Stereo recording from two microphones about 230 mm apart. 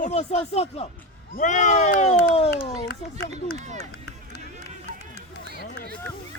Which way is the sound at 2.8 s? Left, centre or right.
Left.